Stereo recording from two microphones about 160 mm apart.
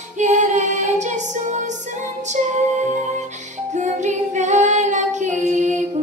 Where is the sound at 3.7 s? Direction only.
50° right (ahead or behind).